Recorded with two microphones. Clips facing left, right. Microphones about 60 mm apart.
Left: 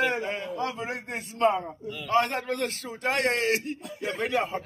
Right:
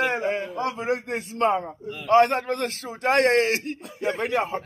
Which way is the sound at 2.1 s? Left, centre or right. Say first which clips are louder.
Right 7 dB; right.